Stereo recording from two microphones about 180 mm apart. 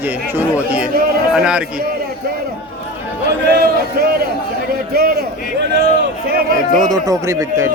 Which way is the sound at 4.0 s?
55° right (ahead or behind).